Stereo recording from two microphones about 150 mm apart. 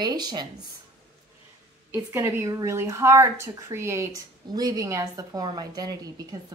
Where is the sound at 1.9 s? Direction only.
15° right (ahead or behind).